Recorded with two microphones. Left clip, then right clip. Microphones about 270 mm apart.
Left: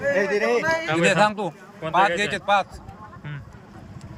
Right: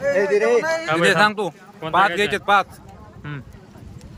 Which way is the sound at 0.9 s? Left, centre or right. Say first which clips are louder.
Right 4 dB; centre.